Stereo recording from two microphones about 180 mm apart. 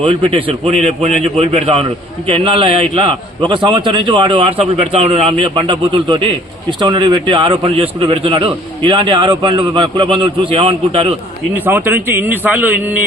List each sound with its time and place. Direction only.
0.0 s a man's voice: 30° right (ahead or behind)
11.5 s a man's voice: 10° right (ahead or behind)